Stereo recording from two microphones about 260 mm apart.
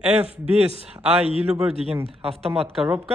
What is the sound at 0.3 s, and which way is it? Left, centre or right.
A man's voice, right.